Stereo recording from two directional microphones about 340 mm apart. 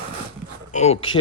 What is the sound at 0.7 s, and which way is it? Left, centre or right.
Speech, centre.